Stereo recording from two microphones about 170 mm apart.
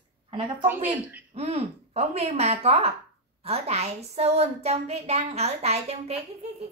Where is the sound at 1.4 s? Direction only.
35° right (ahead or behind).